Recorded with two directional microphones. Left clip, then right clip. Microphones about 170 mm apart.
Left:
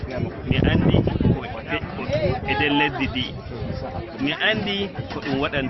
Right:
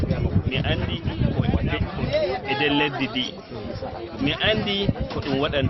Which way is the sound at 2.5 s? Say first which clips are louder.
Left 2 dB; 20° right (ahead or behind).